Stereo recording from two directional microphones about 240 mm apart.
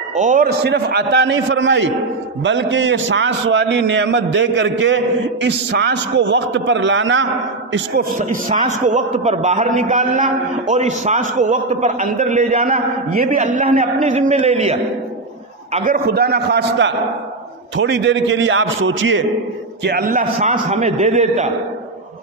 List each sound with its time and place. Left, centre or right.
0.1 s a man's voice: right
7.7 s a man's voice: right
19.8 s a man's voice: right